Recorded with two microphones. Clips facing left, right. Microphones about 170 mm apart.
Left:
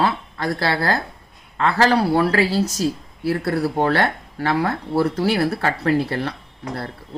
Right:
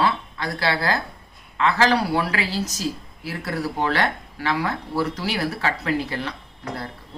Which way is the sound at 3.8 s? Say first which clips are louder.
Left 4 dB; 50° left (ahead or behind).